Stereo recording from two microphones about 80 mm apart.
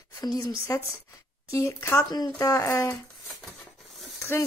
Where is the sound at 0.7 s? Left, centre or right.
Left.